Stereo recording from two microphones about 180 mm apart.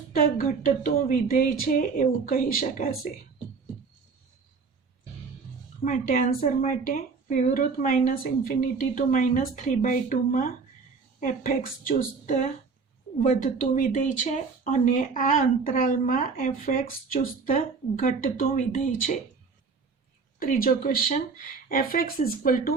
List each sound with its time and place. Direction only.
0.1 s a woman's voice: 50° left (ahead or behind)
5.8 s a woman's voice: 50° left (ahead or behind)
20.4 s a woman's voice: 50° left (ahead or behind)